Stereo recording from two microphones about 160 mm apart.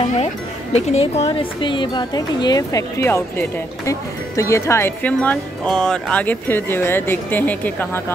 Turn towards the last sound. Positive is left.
turn(degrees=10)  # may be behind; listen again after turning